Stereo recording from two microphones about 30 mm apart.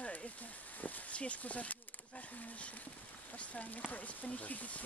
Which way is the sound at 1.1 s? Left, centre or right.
Left.